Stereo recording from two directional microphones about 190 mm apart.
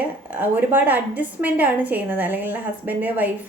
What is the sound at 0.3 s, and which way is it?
A woman's voice, 10° right (ahead or behind).